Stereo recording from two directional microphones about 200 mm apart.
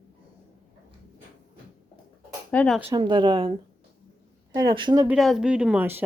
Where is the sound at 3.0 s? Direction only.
25° right (ahead or behind).